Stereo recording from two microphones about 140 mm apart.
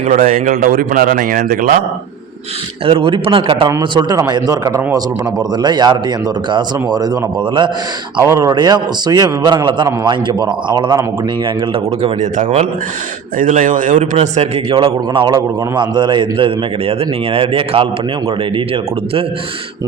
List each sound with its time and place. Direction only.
0.0 s speech: 65° right (ahead or behind)
2.8 s a man's voice: 40° right (ahead or behind)
3.7 s a man's voice: 25° right (ahead or behind)
12.2 s a man's voice: 55° right (ahead or behind)